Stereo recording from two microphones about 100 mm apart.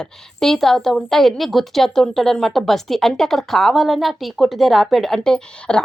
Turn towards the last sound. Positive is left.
turn(degrees=5)  # may be behind; listen again after turning